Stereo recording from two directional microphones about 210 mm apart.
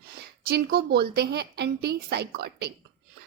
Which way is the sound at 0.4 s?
50° right (ahead or behind).